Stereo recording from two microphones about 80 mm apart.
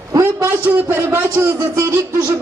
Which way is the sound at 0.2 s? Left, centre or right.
Right.